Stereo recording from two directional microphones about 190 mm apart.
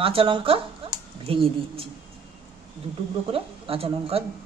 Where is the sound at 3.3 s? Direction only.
30° right (ahead or behind).